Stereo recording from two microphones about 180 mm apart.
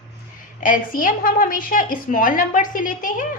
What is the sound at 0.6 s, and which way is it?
A woman's voice, 45° left (ahead or behind).